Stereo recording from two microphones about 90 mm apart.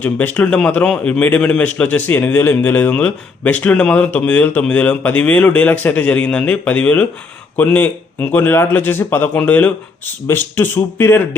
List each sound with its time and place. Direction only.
0.0 s a man's voice: 15° left (ahead or behind)